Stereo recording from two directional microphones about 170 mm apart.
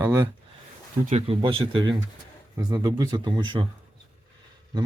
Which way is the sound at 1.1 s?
35° right (ahead or behind).